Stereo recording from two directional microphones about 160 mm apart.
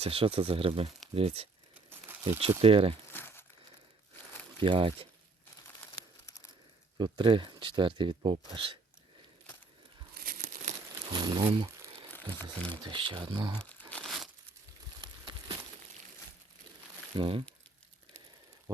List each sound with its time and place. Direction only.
0.0 s speech: 35° right (ahead or behind)
1.7 s crumpling: 10° right (ahead or behind)
2.6 s speech: 35° right (ahead or behind)
3.1 s crumpling: 15° left (ahead or behind)
4.6 s speech: 30° right (ahead or behind)
6.0 s crumpling: 20° left (ahead or behind)
7.0 s speech: 30° right (ahead or behind)
10.2 s crumpling: 65° right (ahead or behind)
11.1 s speech: 25° right (ahead or behind)
12.7 s speech: 30° right (ahead or behind)
13.9 s crumpling: centre (ahead or behind)
15.0 s a sound: 25° right (ahead or behind)
17.2 s speech: 35° right (ahead or behind)